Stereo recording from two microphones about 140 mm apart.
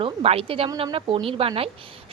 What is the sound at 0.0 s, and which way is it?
Speech, 45° right (ahead or behind).